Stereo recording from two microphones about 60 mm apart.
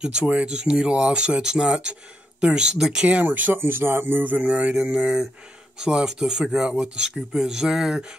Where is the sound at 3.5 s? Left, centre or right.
Right.